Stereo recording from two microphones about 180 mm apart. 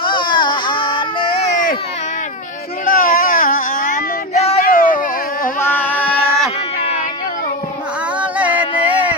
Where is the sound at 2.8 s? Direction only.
50° left (ahead or behind).